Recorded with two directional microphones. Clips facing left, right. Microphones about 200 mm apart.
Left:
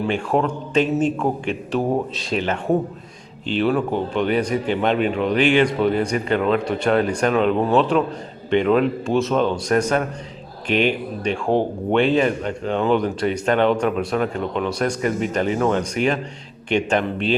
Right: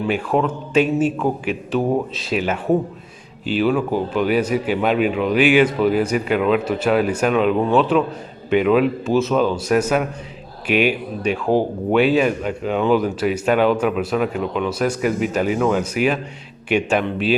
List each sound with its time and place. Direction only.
0.0 s a man's voice: centre (ahead or behind)